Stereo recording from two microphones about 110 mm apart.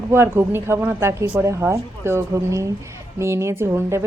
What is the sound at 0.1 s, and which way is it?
Speech, 20° right (ahead or behind).